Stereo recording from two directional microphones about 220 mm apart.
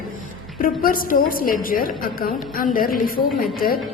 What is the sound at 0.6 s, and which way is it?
A woman's voice, 40° left (ahead or behind).